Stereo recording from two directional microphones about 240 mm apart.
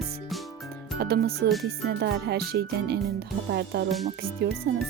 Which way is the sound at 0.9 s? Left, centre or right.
Right.